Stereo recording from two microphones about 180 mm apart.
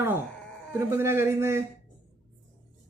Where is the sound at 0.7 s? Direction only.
15° right (ahead or behind).